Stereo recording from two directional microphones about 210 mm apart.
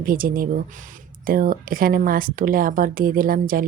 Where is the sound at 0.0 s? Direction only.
40° right (ahead or behind).